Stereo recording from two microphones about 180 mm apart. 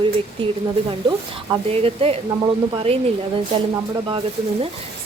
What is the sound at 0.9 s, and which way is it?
Speech, 30° right (ahead or behind).